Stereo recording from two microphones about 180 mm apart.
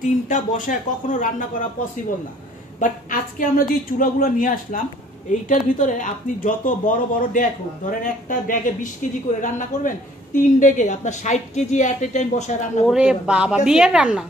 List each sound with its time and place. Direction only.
0.0 s a woman's voice: 45° left (ahead or behind)
2.8 s a woman's voice: 50° left (ahead or behind)
12.9 s a man's voice: 5° right (ahead or behind)